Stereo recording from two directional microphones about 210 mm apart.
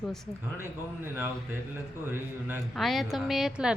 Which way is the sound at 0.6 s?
10° right (ahead or behind).